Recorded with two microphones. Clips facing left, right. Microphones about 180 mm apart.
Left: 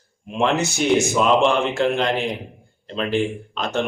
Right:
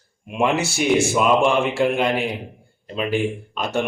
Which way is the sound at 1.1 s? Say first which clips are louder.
Even; 10° right (ahead or behind).